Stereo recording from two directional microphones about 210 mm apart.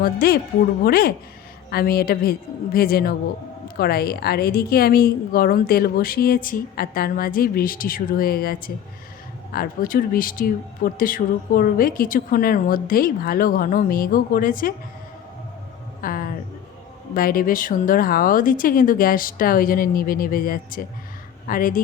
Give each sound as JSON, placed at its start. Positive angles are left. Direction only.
{"t": 0.0, "sound": "speech", "side_deg": 45}
{"t": 16.0, "sound": "music", "side_deg": 40}
{"t": 17.2, "sound": "speech", "side_deg": 45}